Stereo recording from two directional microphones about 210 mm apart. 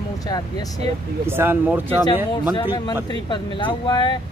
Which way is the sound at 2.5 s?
20° left (ahead or behind).